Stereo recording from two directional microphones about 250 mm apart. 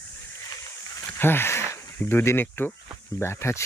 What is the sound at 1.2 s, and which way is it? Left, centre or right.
Speech, centre.